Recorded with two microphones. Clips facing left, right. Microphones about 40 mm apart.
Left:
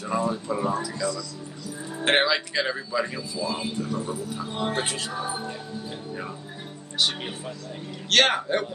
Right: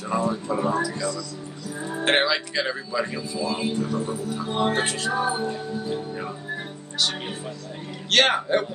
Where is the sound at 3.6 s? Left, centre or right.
Right.